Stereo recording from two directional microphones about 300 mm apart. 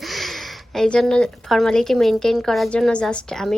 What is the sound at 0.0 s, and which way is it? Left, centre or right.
A woman's voice, centre.